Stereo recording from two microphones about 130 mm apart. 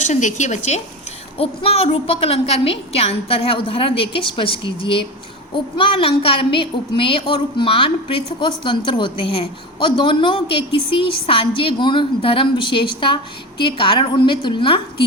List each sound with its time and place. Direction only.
0.0 s a woman's voice: 65° left (ahead or behind)
1.4 s a woman's voice: 45° left (ahead or behind)